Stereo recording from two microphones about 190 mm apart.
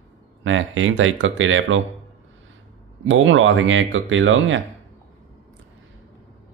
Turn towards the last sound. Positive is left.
turn(degrees=-90)